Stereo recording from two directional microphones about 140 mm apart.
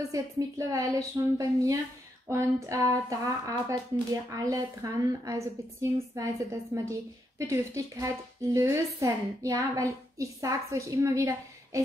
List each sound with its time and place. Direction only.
0.1 s speech: 25° right (ahead or behind)